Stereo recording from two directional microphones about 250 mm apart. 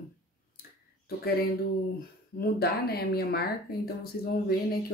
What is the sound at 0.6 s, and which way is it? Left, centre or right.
Clicking, left.